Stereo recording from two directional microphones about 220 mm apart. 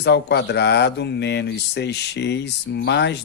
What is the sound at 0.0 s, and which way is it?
Speech, 50° left (ahead or behind).